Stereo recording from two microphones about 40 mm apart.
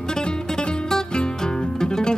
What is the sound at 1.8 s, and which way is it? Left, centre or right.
Music, centre.